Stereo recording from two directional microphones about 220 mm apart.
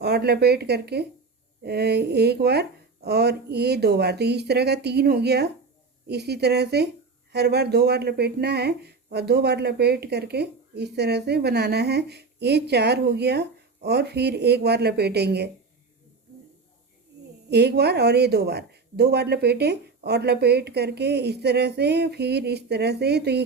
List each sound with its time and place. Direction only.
0.0 s a woman's voice: 45° right (ahead or behind)
17.5 s a woman's voice: 50° right (ahead or behind)